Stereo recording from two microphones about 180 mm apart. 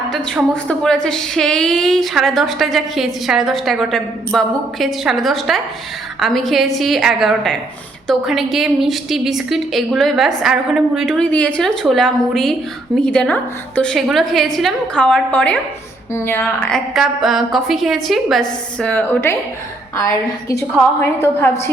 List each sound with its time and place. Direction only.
0.1 s a woman's voice: 5° left (ahead or behind)